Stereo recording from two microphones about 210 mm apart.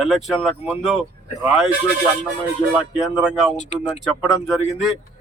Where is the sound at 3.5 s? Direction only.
30° left (ahead or behind).